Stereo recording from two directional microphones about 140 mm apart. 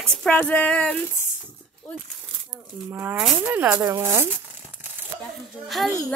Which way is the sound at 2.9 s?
10° right (ahead or behind).